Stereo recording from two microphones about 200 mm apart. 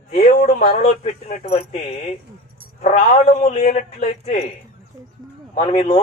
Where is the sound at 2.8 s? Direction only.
35° left (ahead or behind).